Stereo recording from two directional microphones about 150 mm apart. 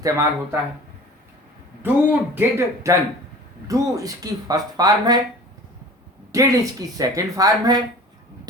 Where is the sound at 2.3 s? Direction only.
20° right (ahead or behind).